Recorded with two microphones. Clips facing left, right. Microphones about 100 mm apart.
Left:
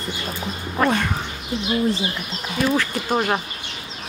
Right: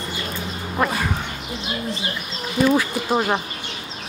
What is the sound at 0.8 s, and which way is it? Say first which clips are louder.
Speech: left 2 dB; 5° right (ahead or behind).